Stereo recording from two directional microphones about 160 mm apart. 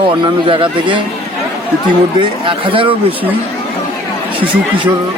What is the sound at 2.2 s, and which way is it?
Speech, 30° right (ahead or behind).